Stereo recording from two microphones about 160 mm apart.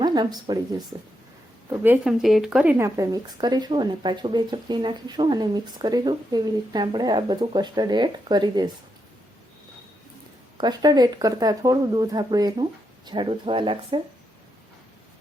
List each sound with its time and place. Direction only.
0.0 s speech: 25° right (ahead or behind)
1.7 s speech: 10° right (ahead or behind)
2.7 s speech: 20° right (ahead or behind)
10.6 s speech: 25° right (ahead or behind)